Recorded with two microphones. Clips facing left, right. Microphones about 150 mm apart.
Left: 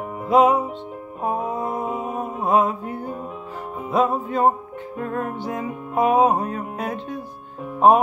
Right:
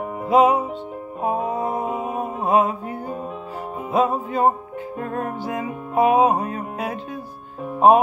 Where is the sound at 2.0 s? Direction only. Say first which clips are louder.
Right 1 dB; 10° right (ahead or behind).